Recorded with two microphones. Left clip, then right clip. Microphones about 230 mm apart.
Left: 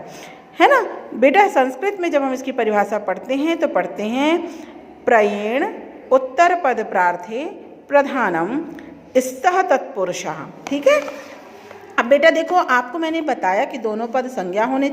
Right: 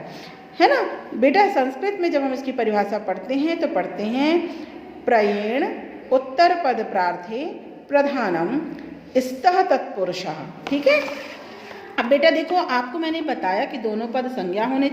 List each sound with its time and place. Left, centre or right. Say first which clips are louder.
1.2 s a woman's voice: left 4 dB; left
5.4 s a woman's voice: left 2 dB; left